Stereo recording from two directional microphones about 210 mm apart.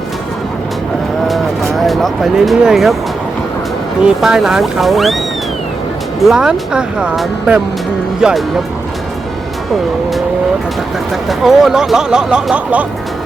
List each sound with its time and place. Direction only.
1.3 s music: centre (ahead or behind)
4.0 s speech: centre (ahead or behind)
6.1 s speech: centre (ahead or behind)
11.3 s speech: centre (ahead or behind)